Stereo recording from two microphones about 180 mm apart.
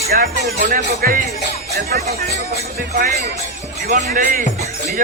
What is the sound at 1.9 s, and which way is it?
Music, 60° right (ahead or behind).